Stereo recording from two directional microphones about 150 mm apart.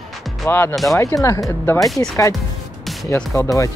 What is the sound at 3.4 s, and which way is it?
Speech, 20° left (ahead or behind).